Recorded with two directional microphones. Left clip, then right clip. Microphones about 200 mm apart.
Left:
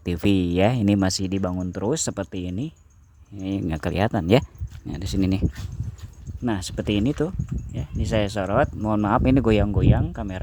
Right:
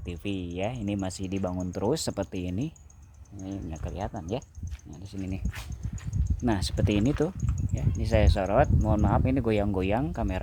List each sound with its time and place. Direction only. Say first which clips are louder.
0.0 s speech: left 12 dB; 40° left (ahead or behind); by 2.7 s 10° left (ahead or behind)
3.4 s speech: left 11 dB; 40° left (ahead or behind)
6.4 s speech: left 2 dB; 10° left (ahead or behind)
9.6 s speech: left 2 dB; 10° left (ahead or behind)